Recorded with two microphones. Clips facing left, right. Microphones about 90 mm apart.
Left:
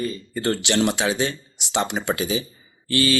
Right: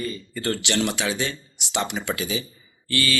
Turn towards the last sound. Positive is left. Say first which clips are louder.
# left 5 dB
turn(degrees=20)  # may be behind; listen again after turning